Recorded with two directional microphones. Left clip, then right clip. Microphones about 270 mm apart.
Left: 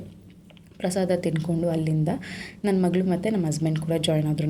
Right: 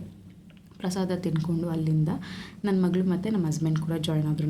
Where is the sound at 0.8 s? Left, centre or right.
Centre.